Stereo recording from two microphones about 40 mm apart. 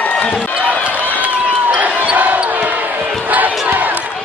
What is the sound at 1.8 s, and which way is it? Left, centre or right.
Basketball bounce, right.